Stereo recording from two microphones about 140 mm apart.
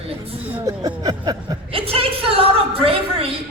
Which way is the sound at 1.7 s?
45° right (ahead or behind).